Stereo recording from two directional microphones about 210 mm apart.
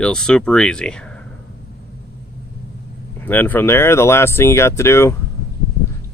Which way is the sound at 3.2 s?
10° left (ahead or behind).